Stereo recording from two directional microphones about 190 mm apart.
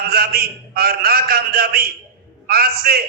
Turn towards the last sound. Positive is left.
turn(degrees=-55)  # may be behind; listen again after turning